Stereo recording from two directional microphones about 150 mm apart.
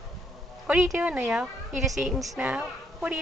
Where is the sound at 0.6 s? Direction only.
10° right (ahead or behind).